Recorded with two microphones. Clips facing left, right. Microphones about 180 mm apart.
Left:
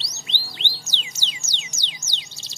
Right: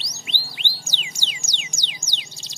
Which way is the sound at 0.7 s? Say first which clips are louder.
Right 1 dB; 10° right (ahead or behind).